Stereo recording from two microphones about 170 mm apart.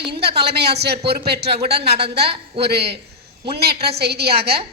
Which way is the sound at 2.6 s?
75° right (ahead or behind).